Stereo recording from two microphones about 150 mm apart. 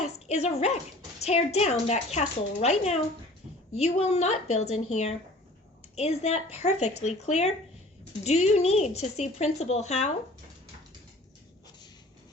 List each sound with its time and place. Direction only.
0.0 s dog: 45° left (ahead or behind)
1.2 s a woman's voice: 45° left (ahead or behind)